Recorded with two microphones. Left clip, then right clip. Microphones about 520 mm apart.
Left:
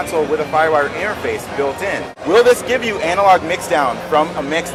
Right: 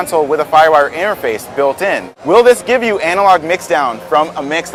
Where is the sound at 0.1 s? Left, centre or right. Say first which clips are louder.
Right 6 dB; right.